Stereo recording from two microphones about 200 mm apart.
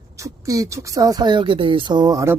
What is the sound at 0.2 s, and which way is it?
Speech, 15° right (ahead or behind).